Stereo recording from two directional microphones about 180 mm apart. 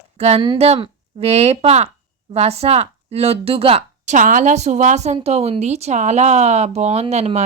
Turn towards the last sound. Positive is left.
turn(degrees=-35)  # may be behind; listen again after turning